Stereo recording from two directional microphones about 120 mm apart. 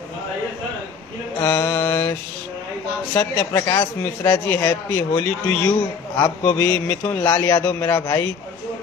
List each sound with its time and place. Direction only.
1.4 s mantra: 20° left (ahead or behind)
3.2 s speech: 20° left (ahead or behind)